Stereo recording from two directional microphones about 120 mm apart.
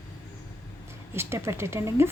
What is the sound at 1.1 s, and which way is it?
Speech, 20° right (ahead or behind).